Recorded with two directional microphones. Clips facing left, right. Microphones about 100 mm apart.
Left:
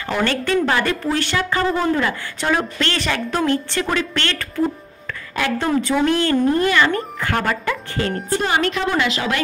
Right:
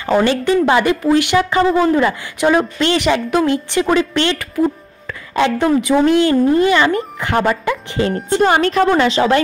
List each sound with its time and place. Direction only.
0.2 s a woman's voice: 15° right (ahead or behind)
5.6 s a woman's voice: 15° right (ahead or behind)
8.5 s a woman's voice: 40° right (ahead or behind)